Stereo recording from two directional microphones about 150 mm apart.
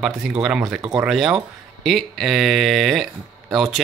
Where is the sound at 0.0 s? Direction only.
5° right (ahead or behind).